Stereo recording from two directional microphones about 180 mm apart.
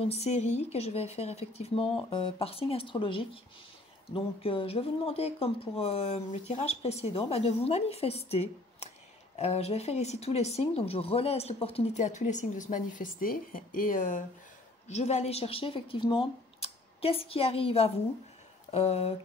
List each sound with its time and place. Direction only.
0.0 s speech: 35° left (ahead or behind)